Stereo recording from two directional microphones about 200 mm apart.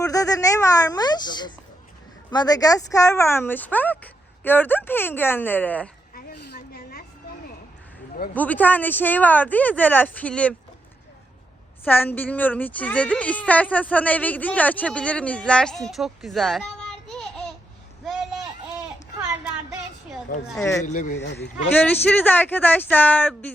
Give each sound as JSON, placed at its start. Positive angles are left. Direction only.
{"t": 0.0, "sound": "speech", "side_deg": 15}
{"t": 6.1, "sound": "a sound", "side_deg": 50}
{"t": 8.3, "sound": "speech", "side_deg": 10}
{"t": 11.9, "sound": "speech", "side_deg": 10}
{"t": 20.6, "sound": "speech", "side_deg": 15}
{"t": 20.8, "sound": "speech", "side_deg": 40}
{"t": 21.7, "sound": "speech", "side_deg": 10}